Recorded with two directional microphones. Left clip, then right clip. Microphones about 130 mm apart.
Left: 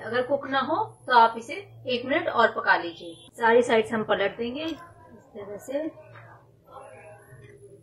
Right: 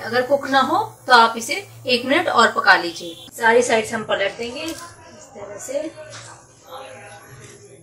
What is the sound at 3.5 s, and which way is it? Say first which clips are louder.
Speech: right 4 dB; 35° left (ahead or behind).